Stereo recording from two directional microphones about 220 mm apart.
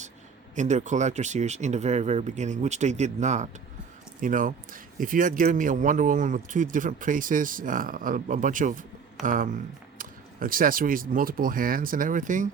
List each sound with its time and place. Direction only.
0.5 s speech: 35° right (ahead or behind)